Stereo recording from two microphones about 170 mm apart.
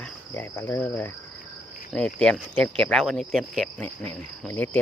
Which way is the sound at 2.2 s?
5° left (ahead or behind).